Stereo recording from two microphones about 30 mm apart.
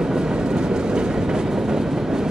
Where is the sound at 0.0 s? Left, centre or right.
Right.